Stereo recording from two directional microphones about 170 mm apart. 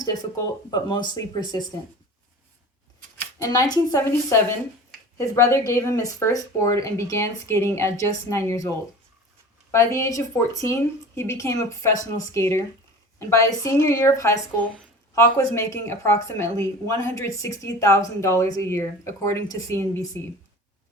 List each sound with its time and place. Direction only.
0.0 s speech: 20° left (ahead or behind)
3.3 s a woman's voice: 20° left (ahead or behind)
9.7 s a woman's voice: 15° left (ahead or behind)